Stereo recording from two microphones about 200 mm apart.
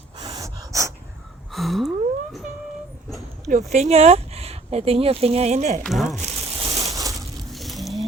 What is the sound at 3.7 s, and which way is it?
Speech, 30° right (ahead or behind).